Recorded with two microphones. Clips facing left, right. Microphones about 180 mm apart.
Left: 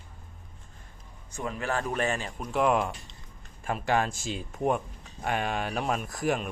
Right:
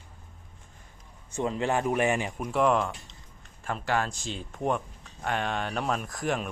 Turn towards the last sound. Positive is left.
turn(degrees=5)  # may be behind; listen again after turning